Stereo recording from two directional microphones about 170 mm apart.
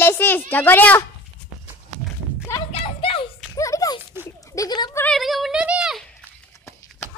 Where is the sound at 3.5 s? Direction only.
20° left (ahead or behind).